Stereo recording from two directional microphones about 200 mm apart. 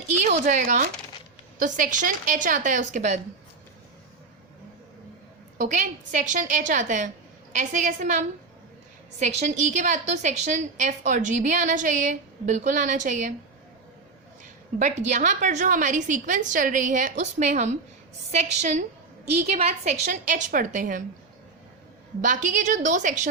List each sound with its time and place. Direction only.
0.4 s a woman's voice: 40° right (ahead or behind)
5.5 s a woman's voice: 40° right (ahead or behind)
14.8 s a woman's voice: 35° right (ahead or behind)
22.2 s a woman's voice: 40° right (ahead or behind)